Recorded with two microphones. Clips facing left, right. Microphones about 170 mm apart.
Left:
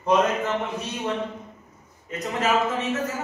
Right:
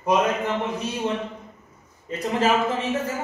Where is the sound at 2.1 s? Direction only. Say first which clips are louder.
Right 3 dB; 30° right (ahead or behind).